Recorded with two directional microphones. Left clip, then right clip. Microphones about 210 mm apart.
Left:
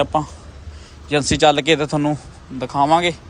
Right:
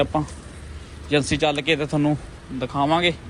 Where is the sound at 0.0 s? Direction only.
10° left (ahead or behind).